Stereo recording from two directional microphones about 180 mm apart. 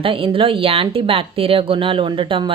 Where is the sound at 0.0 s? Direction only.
30° right (ahead or behind).